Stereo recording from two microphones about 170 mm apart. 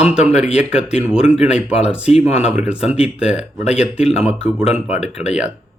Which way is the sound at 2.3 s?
40° left (ahead or behind).